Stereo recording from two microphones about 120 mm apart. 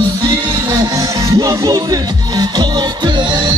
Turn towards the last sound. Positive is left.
turn(degrees=-35)  # may be behind; listen again after turning